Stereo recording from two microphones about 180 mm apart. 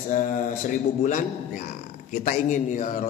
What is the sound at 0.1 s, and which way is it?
Speech, 45° left (ahead or behind).